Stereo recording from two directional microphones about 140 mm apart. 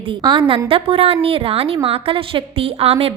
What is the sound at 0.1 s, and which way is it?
A woman's voice, 35° right (ahead or behind).